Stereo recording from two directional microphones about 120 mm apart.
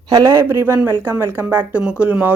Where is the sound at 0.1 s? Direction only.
30° right (ahead or behind).